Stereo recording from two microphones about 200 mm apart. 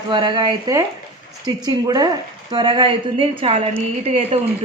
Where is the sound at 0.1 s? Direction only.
25° right (ahead or behind).